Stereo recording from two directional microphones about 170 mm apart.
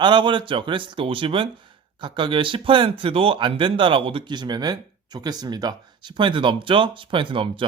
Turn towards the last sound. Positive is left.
turn(degrees=-30)  # may be behind; listen again after turning